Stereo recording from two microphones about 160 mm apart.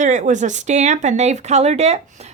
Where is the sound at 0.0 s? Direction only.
50° right (ahead or behind).